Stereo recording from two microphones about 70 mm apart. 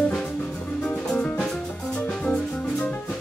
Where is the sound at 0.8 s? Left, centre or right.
Centre.